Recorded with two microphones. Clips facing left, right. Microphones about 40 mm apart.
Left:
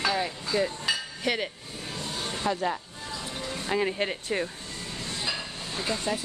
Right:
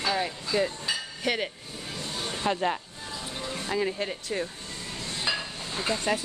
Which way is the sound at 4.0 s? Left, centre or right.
Left.